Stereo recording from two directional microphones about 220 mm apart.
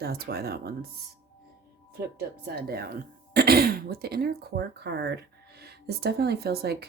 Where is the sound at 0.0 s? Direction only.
45° right (ahead or behind).